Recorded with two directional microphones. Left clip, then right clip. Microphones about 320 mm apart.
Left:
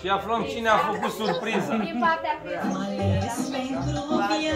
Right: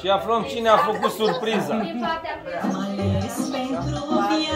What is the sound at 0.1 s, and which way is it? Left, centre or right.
Speech, right.